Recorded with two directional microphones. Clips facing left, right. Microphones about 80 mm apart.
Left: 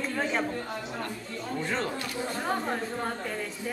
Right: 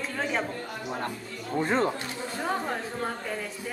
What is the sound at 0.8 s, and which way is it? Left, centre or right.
Speech, right.